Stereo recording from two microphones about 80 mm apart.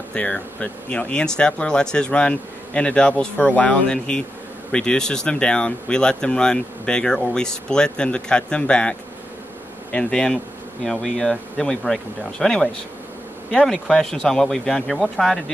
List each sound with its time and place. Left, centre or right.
0.1 s speech: centre